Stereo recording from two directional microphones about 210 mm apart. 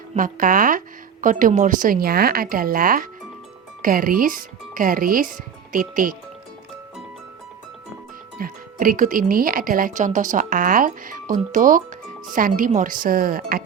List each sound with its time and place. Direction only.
0.1 s speech: 40° right (ahead or behind)
8.4 s speech: 40° right (ahead or behind)